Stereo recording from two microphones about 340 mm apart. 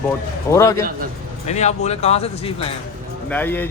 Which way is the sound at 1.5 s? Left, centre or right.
Centre.